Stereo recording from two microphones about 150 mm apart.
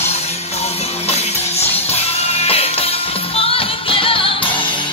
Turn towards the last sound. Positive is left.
turn(degrees=35)  # may be behind; listen again after turning